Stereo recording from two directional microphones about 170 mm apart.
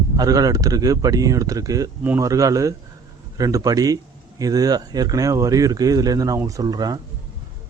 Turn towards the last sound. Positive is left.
turn(degrees=-25)  # may be behind; listen again after turning